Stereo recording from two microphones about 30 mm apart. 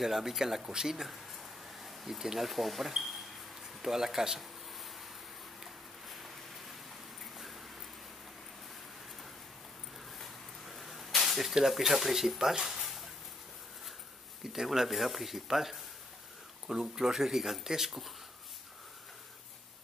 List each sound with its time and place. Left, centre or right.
0.0 s speech: centre
0.7 s a sound: centre
2.4 s speech: centre
4.4 s a sound: centre
10.7 s a sound: centre
11.5 s speech: centre
14.4 s speech: centre
16.6 s speech: right
17.0 s speech: centre